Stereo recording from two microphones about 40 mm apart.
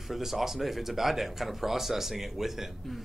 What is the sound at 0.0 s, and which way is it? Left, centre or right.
A man's voice, centre.